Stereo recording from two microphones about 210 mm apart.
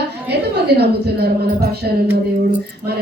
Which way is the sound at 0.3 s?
50° right (ahead or behind).